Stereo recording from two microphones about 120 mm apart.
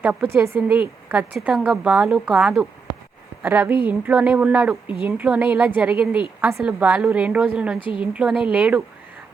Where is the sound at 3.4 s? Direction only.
15° right (ahead or behind).